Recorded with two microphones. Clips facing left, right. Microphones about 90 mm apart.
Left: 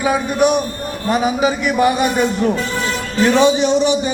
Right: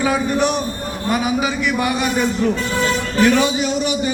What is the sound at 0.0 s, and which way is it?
Speech, 20° left (ahead or behind).